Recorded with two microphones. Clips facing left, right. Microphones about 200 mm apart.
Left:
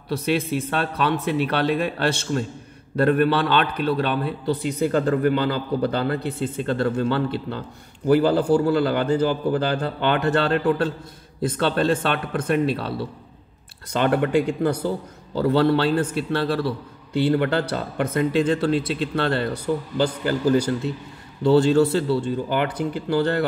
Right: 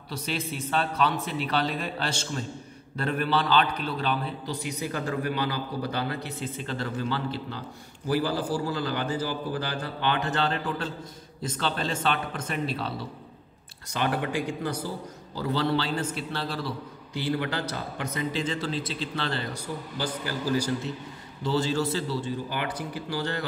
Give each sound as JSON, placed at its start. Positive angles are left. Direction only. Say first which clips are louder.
{"t": 0.1, "sound": "a man's voice", "louder": "left 10 dB", "side_deg": 60}
{"t": 13.9, "sound": "a man's voice", "louder": "left 8 dB", "side_deg": 55}